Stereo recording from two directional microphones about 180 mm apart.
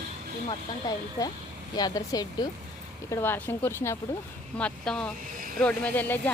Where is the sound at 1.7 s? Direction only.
20° left (ahead or behind).